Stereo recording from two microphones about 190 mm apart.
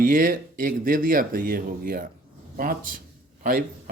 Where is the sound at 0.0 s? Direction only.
45° right (ahead or behind).